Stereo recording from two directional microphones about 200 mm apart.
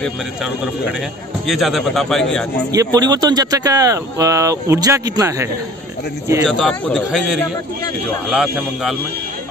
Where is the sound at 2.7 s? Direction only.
20° right (ahead or behind).